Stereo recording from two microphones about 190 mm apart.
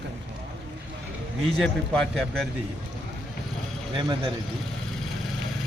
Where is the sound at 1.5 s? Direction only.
5° left (ahead or behind).